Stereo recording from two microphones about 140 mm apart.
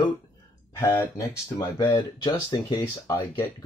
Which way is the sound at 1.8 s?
30° left (ahead or behind).